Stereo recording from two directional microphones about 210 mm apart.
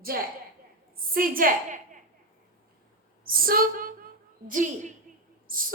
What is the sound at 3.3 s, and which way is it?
A woman's voice, 45° right (ahead or behind).